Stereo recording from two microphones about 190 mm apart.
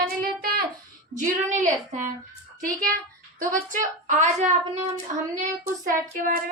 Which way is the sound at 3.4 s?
45° right (ahead or behind).